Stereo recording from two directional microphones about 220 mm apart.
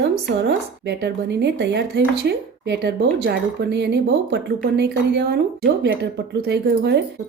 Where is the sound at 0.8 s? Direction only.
50° right (ahead or behind).